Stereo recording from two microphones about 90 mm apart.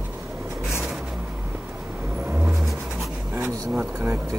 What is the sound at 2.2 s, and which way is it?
Vehicle, 15° right (ahead or behind).